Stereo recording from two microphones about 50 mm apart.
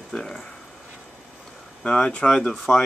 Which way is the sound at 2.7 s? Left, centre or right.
Left.